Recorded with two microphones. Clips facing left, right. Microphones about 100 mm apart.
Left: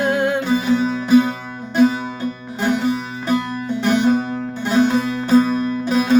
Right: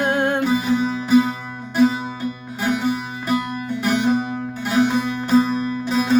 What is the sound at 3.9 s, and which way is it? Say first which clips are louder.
Music: left 3 dB; 5° right (ahead or behind).